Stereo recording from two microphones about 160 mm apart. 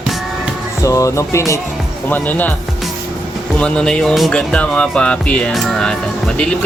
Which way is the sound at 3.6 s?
5° left (ahead or behind).